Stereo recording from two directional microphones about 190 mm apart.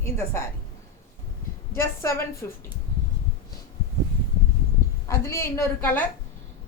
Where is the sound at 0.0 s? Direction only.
15° left (ahead or behind).